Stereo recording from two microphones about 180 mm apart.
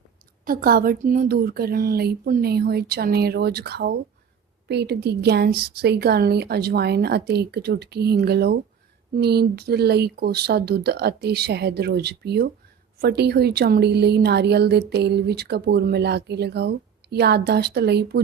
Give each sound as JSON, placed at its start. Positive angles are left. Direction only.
{"t": 0.4, "sound": "a woman's voice", "side_deg": -55}